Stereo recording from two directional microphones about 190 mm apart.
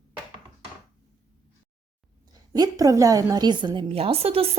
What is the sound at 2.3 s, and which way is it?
A woman's voice, 20° right (ahead or behind).